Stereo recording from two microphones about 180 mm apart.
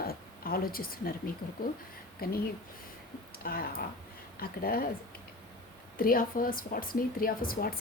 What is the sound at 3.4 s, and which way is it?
A woman's voice, 55° left (ahead or behind).